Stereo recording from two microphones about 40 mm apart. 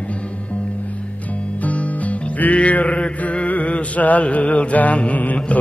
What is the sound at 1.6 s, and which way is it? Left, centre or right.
Music, left.